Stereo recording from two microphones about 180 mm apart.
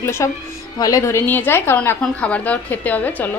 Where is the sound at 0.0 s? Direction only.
15° left (ahead or behind).